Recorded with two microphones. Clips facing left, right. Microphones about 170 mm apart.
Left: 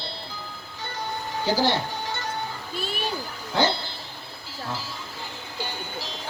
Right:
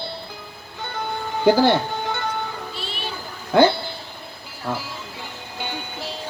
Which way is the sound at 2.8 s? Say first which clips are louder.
Left 2 dB; 45° left (ahead or behind).